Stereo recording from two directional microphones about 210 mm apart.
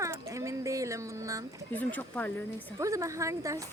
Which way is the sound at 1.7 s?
5° left (ahead or behind).